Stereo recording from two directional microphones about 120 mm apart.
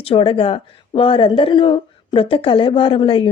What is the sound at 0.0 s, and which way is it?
Speech, 50° left (ahead or behind).